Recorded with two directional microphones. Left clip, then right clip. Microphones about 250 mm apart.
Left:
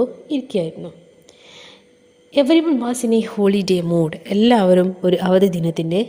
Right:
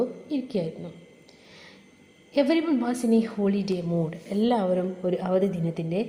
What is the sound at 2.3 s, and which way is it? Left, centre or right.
A woman's voice, left.